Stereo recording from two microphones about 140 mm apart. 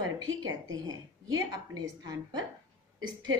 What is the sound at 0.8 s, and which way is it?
A woman's voice, 25° right (ahead or behind).